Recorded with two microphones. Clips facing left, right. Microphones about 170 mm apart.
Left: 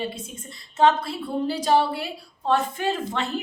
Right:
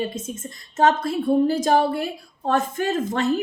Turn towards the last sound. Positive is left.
turn(degrees=-45)  # may be behind; listen again after turning